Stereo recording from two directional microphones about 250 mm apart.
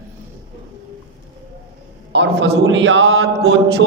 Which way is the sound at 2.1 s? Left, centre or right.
Right.